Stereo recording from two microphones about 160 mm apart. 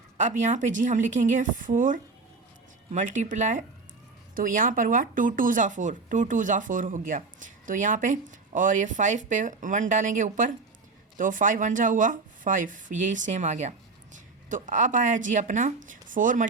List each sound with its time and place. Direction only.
0.2 s speech: 50° right (ahead or behind)